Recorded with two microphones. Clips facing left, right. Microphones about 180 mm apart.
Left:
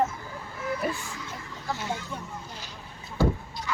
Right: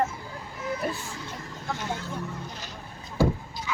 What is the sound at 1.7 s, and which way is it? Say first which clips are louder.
Speech: even; 5° left (ahead or behind).